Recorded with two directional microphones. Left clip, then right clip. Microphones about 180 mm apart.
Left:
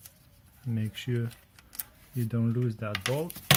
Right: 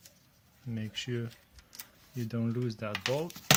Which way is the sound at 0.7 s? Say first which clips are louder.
Left 2 dB; centre (ahead or behind).